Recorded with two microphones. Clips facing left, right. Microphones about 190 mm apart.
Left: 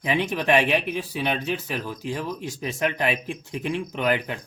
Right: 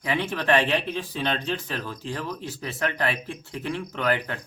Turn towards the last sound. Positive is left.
turn(degrees=15)  # may be behind; listen again after turning